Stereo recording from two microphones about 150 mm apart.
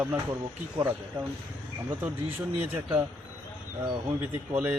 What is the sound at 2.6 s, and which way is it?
Speech, 15° right (ahead or behind).